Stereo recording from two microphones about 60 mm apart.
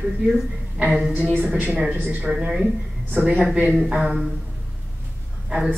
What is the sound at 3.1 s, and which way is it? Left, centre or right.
Speech, right.